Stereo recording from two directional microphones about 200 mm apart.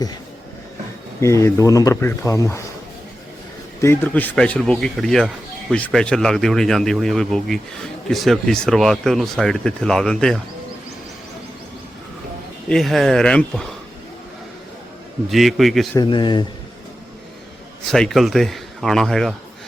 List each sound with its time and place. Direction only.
1.2 s speech: 15° left (ahead or behind)
3.8 s speech: 10° left (ahead or behind)
12.6 s speech: centre (ahead or behind)
15.3 s speech: centre (ahead or behind)
16.0 s speech: 20° left (ahead or behind)
17.9 s speech: centre (ahead or behind)